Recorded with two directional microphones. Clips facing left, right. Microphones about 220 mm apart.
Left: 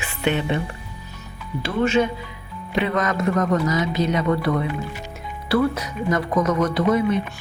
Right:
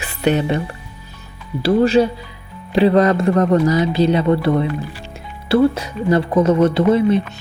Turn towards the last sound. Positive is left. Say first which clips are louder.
# right 5 dB
turn(degrees=-30)  # may be behind; listen again after turning